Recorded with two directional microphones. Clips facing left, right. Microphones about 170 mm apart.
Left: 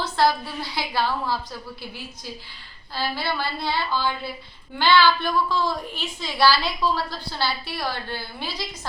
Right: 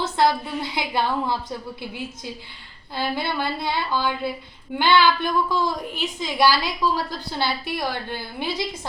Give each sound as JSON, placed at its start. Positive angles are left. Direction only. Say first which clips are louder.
{"t": 0.0, "sound": "a woman's voice", "louder": "right 1 dB", "side_deg": -20}
{"t": 2.9, "sound": "a woman's voice", "louder": "right 2 dB", "side_deg": -20}